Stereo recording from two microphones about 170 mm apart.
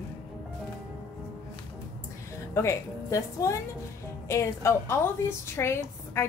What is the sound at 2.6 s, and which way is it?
A woman's voice, 15° left (ahead or behind).